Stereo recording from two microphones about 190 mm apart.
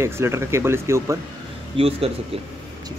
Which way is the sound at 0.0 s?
15° right (ahead or behind).